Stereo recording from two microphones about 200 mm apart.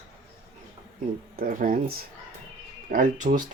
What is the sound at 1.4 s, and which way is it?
Speech, 45° right (ahead or behind).